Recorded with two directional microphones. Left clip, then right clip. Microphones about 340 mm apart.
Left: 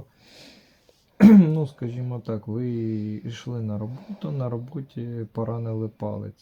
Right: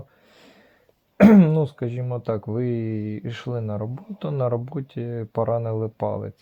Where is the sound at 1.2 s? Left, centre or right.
Centre.